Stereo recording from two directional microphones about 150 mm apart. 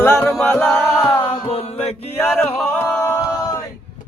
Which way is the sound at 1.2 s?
30° left (ahead or behind).